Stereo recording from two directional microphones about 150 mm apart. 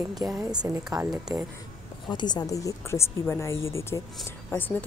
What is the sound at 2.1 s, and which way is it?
A woman's voice, 30° left (ahead or behind).